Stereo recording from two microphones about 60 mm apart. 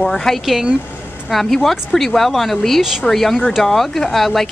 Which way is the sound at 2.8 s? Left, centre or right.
Centre.